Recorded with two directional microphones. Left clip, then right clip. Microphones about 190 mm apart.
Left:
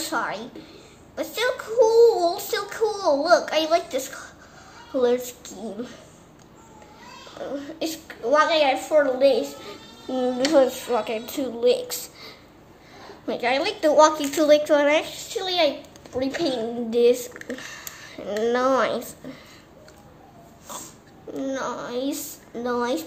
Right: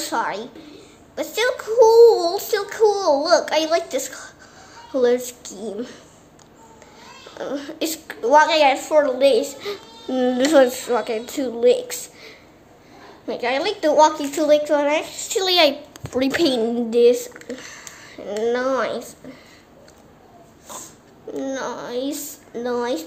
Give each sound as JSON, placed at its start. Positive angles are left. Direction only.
{"t": 0.0, "sound": "a woman's voice", "side_deg": -15}
{"t": 7.4, "sound": "a woman's voice", "side_deg": -35}
{"t": 10.0, "sound": "speech", "side_deg": -15}
{"t": 10.3, "sound": "a woman's voice", "side_deg": -30}
{"t": 10.7, "sound": "a child's voice", "side_deg": -15}
{"t": 15.2, "sound": "a child's voice", "side_deg": -25}
{"t": 16.9, "sound": "speech", "side_deg": -10}
{"t": 20.7, "sound": "a sound", "side_deg": 0}
{"t": 21.3, "sound": "a child's voice", "side_deg": -10}